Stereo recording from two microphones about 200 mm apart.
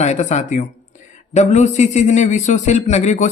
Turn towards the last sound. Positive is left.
turn(degrees=35)  # may be behind; listen again after turning